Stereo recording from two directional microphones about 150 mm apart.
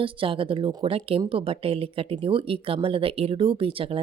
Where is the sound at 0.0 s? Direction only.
35° right (ahead or behind).